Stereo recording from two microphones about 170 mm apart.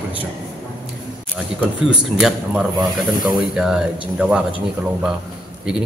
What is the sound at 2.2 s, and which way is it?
A man's voice, centre (ahead or behind).